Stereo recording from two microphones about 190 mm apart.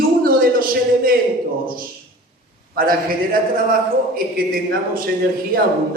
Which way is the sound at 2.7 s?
50° right (ahead or behind).